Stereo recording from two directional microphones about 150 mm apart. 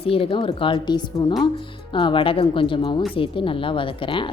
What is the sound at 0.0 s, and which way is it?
A woman's voice, 40° left (ahead or behind).